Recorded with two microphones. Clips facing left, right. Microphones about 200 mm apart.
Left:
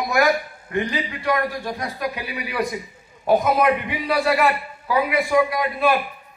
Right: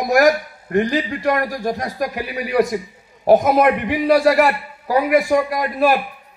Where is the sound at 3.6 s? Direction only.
40° right (ahead or behind).